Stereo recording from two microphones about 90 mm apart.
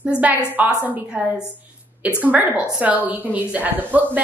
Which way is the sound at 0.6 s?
15° right (ahead or behind).